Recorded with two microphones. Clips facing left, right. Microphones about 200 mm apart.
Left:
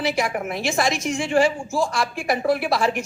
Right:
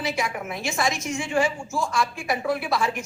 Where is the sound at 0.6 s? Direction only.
75° left (ahead or behind).